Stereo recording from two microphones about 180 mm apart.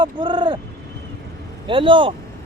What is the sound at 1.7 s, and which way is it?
Speech, 30° right (ahead or behind).